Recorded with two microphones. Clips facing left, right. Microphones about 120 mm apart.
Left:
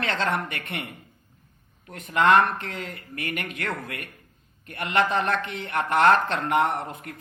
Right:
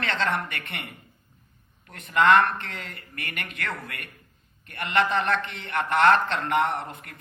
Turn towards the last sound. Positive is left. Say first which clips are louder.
# left 1 dB
turn(degrees=40)  # may be behind; listen again after turning